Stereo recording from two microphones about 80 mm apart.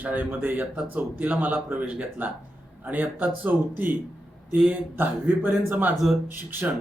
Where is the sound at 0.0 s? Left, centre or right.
Right.